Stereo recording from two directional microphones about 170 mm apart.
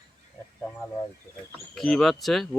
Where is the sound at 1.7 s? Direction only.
Centre (ahead or behind).